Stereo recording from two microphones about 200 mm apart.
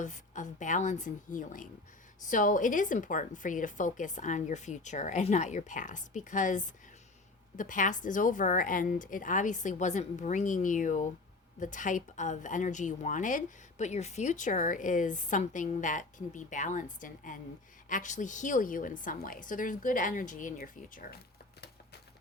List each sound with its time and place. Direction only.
0.0 s a woman's voice: 40° left (ahead or behind)